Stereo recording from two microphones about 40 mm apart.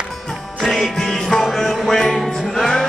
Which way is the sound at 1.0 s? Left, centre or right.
Centre.